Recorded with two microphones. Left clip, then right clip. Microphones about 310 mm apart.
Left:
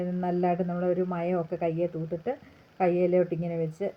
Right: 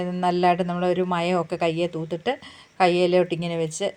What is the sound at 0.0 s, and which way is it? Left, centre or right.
Speech, right.